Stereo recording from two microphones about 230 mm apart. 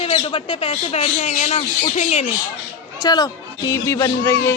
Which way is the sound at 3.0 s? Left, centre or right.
Centre.